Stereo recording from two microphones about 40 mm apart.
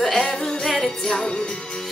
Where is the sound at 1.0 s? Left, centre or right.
Centre.